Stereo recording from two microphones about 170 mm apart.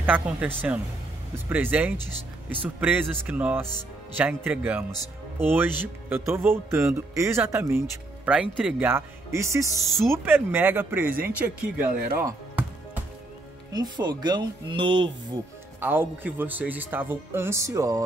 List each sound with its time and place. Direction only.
0.0 s speech: 10° right (ahead or behind)
12.2 s music: 15° right (ahead or behind)
13.7 s speech: 25° right (ahead or behind)
15.8 s speech: 10° right (ahead or behind)